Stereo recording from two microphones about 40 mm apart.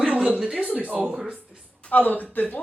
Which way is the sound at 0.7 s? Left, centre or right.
Right.